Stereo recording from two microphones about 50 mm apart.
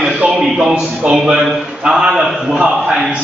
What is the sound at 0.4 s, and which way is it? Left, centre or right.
Speech, centre.